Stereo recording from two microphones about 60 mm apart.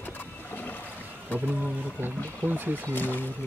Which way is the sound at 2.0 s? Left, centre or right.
Right.